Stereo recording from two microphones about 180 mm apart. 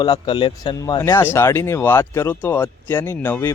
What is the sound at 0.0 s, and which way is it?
Speech, 25° left (ahead or behind).